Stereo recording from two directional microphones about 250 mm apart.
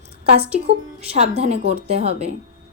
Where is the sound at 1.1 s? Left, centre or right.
Right.